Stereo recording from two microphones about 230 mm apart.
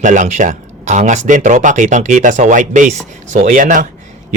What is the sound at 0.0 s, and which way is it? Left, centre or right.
Speech, right.